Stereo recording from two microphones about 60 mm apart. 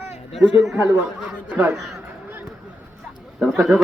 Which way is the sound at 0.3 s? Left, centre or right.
Centre.